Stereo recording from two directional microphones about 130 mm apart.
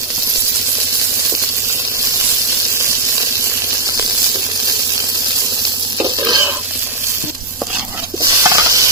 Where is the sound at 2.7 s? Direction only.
20° right (ahead or behind).